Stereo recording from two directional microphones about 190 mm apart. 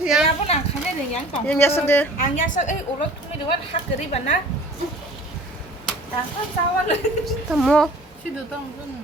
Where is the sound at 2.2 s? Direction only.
45° left (ahead or behind).